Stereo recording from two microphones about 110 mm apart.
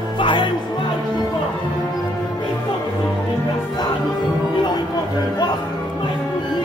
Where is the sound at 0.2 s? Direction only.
45° left (ahead or behind).